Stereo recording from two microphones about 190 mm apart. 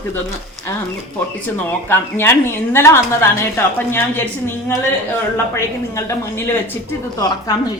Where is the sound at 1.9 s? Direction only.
10° left (ahead or behind).